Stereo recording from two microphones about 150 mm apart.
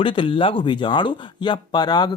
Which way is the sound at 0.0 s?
35° left (ahead or behind).